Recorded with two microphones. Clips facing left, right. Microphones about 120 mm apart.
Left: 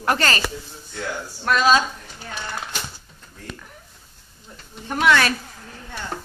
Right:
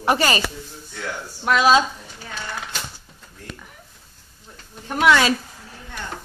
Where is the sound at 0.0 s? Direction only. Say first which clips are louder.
Right 2 dB; 10° right (ahead or behind).